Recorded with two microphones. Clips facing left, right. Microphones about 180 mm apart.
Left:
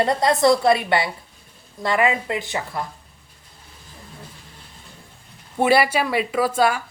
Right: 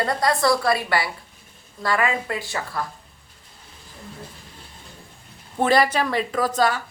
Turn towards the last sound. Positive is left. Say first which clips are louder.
# left 2 dB
turn(degrees=10)  # may be behind; listen again after turning